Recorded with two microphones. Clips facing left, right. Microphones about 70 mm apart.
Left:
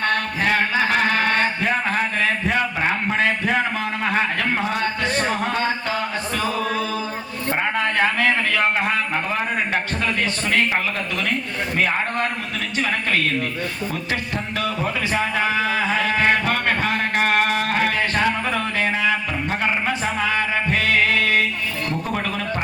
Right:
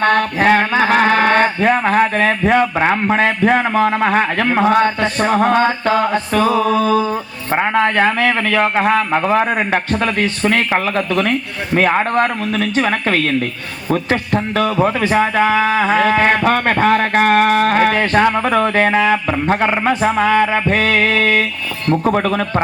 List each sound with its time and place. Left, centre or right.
0.0 s speech: right
10.2 s a man's voice: right
10.7 s speech: right